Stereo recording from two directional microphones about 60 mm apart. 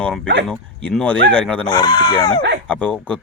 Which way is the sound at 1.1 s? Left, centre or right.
Left.